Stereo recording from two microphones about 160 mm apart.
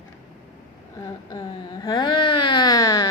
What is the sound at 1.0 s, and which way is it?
Speech, 25° left (ahead or behind).